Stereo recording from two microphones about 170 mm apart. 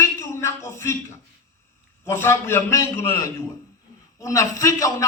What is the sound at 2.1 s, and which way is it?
A woman's voice, 15° left (ahead or behind).